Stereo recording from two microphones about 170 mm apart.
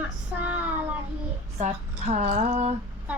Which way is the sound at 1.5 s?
45° right (ahead or behind).